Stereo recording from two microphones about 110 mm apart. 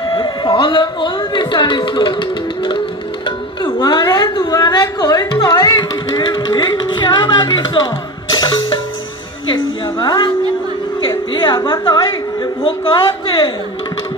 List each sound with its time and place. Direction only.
0.1 s speech: 45° left (ahead or behind)
3.3 s music: 45° left (ahead or behind)
9.5 s a woman's voice: 45° left (ahead or behind)